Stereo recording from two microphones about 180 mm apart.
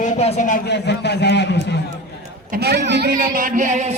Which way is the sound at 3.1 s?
50° right (ahead or behind).